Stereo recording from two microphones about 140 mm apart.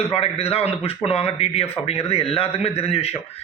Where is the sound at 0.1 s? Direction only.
45° left (ahead or behind).